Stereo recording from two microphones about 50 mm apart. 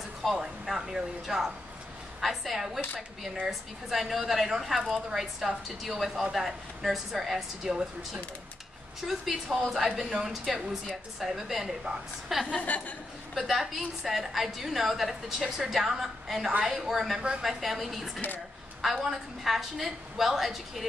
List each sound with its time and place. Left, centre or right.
0.4 s a woman's voice: centre
12.5 s a woman's voice: left
13.3 s a woman's voice: centre